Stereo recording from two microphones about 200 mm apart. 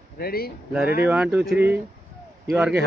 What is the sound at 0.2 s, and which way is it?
Speech, 50° left (ahead or behind).